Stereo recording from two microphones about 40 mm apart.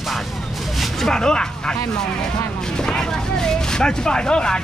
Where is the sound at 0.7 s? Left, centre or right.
Centre.